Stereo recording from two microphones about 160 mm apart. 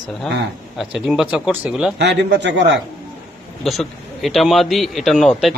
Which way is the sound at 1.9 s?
90° right.